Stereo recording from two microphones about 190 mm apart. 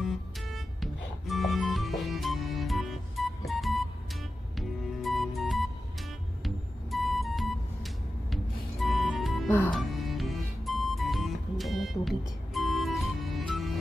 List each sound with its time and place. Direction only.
0.0 s music: centre (ahead or behind)